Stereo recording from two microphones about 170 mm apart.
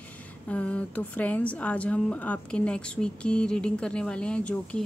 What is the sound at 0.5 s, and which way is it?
A woman's voice, 10° left (ahead or behind).